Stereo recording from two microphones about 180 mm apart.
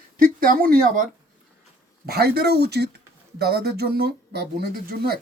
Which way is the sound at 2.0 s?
60° right (ahead or behind).